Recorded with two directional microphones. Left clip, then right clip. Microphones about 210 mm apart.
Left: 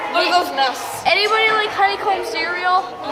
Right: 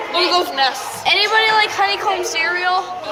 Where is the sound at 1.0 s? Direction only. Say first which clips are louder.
Right 1 dB; 5° left (ahead or behind).